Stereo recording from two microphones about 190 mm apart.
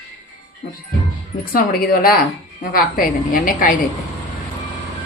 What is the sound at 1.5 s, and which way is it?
A woman's voice, 50° left (ahead or behind).